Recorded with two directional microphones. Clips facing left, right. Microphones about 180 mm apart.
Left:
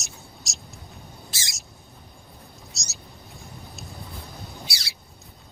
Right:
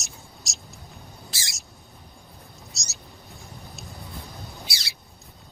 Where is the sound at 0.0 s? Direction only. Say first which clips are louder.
Left 1 dB; centre (ahead or behind).